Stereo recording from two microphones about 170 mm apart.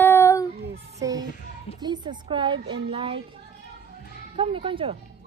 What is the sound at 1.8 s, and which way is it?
A woman's voice, 25° right (ahead or behind).